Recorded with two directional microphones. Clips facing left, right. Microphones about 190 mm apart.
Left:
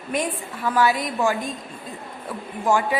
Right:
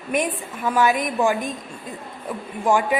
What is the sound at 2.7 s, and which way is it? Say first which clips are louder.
Speech: right 1 dB; 15° right (ahead or behind).